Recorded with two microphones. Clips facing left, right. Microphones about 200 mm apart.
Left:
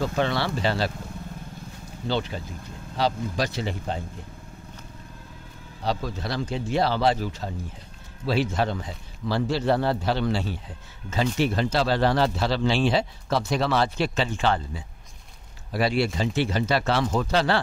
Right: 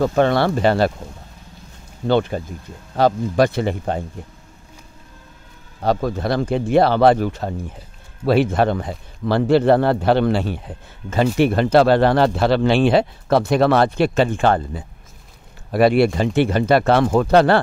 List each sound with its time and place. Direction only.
0.0 s speech: 50° right (ahead or behind)
2.0 s speech: 55° right (ahead or behind)
5.8 s speech: 55° right (ahead or behind)